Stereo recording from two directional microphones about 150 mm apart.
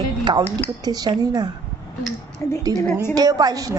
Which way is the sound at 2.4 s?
20° left (ahead or behind).